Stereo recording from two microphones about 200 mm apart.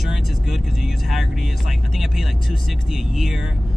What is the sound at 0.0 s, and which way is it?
Vehicle, centre (ahead or behind).